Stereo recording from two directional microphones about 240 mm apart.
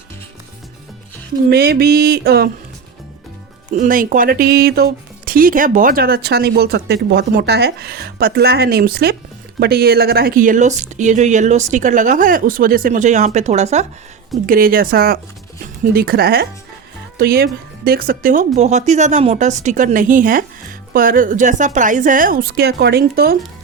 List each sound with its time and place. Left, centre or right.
1.5 s speech: right
3.8 s speech: right